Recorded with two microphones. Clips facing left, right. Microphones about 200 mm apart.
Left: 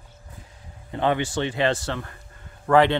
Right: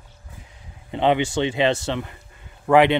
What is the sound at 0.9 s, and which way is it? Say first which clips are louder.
Speech: right 4 dB; 20° right (ahead or behind).